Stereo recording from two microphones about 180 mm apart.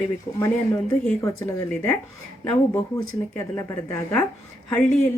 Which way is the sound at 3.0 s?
15° left (ahead or behind).